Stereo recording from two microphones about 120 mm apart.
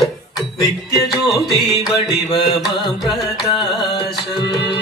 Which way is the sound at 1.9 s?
35° left (ahead or behind).